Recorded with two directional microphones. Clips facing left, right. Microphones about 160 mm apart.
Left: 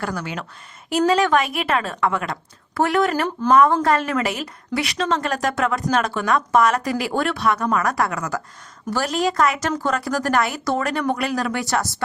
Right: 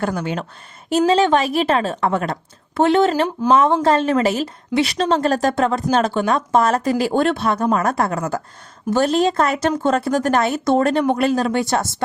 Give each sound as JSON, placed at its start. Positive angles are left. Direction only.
{"t": 0.0, "sound": "a woman's voice", "side_deg": -25}
{"t": 2.7, "sound": "a woman's voice", "side_deg": -25}